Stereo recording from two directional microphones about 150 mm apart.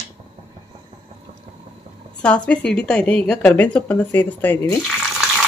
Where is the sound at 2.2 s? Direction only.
5° left (ahead or behind).